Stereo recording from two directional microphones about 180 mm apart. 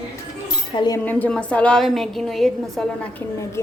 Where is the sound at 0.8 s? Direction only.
15° left (ahead or behind).